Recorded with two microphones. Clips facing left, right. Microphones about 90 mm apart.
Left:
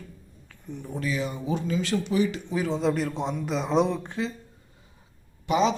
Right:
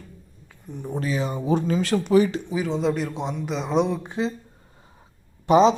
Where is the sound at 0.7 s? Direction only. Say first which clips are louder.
Right 4 dB; 20° right (ahead or behind).